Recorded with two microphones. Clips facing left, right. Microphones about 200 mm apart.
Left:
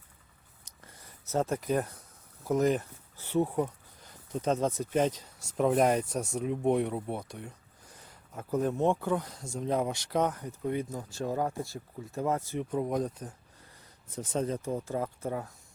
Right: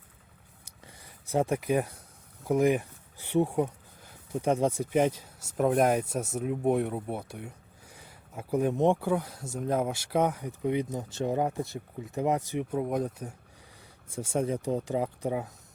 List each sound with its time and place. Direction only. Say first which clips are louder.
0.6 s a sound: right 2 dB; 15° right (ahead or behind)
2.5 s speech: right 2 dB; 10° right (ahead or behind)
12.7 s speech: even; 5° right (ahead or behind)